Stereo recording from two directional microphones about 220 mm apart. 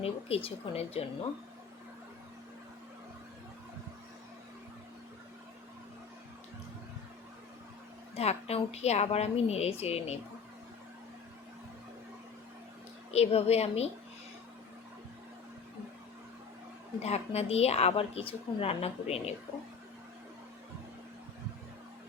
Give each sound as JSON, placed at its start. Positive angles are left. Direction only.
{"t": 0.0, "sound": "a woman's voice", "side_deg": 25}
{"t": 8.1, "sound": "a woman's voice", "side_deg": 30}
{"t": 13.1, "sound": "a woman's voice", "side_deg": 30}
{"t": 17.0, "sound": "a woman's voice", "side_deg": 30}